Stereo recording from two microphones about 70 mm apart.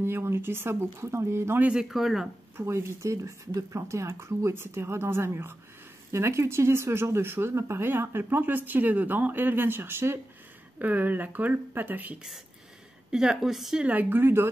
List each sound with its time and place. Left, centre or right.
0.0 s speech: right
1.6 s a woman's voice: centre
2.5 s speech: right
13.1 s a woman's voice: centre
13.8 s speech: right